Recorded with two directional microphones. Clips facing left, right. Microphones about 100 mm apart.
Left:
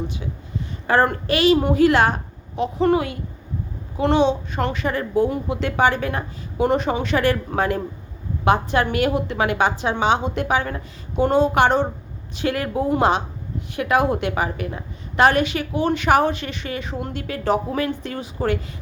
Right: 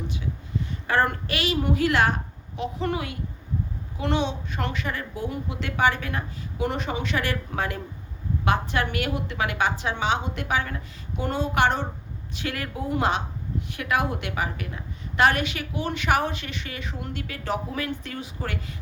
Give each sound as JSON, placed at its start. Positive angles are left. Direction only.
{"t": 0.9, "sound": "a woman's voice", "side_deg": 30}
{"t": 8.4, "sound": "a woman's voice", "side_deg": 25}